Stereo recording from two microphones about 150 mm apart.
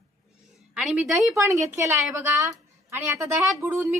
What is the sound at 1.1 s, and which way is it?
A woman's voice, 20° right (ahead or behind).